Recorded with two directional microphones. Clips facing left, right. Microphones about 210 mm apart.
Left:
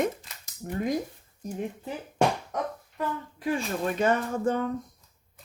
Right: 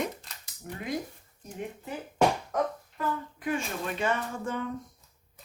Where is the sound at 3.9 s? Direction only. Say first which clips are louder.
Left 5 dB; 40° left (ahead or behind).